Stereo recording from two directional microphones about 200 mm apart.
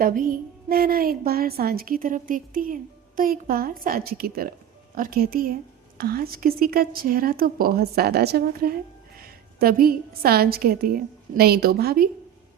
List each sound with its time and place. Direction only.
0.0 s a woman's voice: 45° right (ahead or behind)